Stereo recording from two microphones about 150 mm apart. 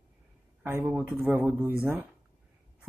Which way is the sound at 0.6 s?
10° right (ahead or behind).